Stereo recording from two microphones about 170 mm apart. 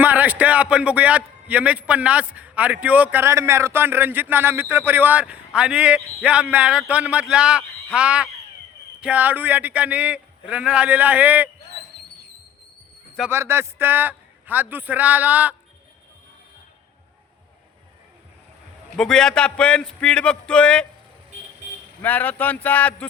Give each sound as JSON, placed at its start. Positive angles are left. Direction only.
{"t": 0.0, "sound": "a man's voice", "side_deg": -10}
{"t": 11.9, "sound": "a sound", "side_deg": -65}
{"t": 13.3, "sound": "a man's voice", "side_deg": -15}
{"t": 18.9, "sound": "a man's voice", "side_deg": 5}
{"t": 22.0, "sound": "speech", "side_deg": 10}